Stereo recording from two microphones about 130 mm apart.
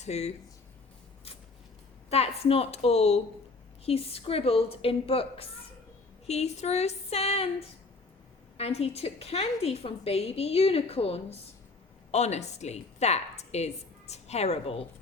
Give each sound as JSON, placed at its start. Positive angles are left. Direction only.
{"t": 0.0, "sound": "a woman's voice", "side_deg": 55}
{"t": 2.0, "sound": "a woman's voice", "side_deg": 50}
{"t": 6.2, "sound": "a woman's voice", "side_deg": 55}
{"t": 8.5, "sound": "a woman's voice", "side_deg": 55}